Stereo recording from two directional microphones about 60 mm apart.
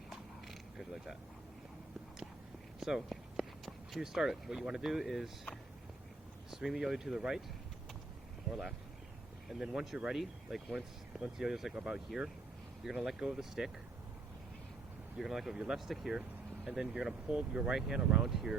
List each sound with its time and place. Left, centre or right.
0.1 s creak: centre
2.8 s speech: centre
6.5 s speech: centre
9.5 s speech: centre
15.2 s speech: centre
17.7 s speech: centre